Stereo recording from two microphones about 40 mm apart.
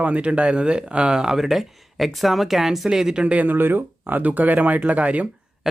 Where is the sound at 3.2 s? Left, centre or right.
Right.